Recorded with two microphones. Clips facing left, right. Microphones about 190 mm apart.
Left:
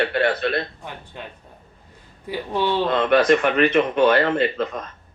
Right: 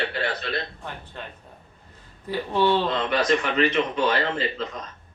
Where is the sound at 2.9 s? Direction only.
55° left (ahead or behind).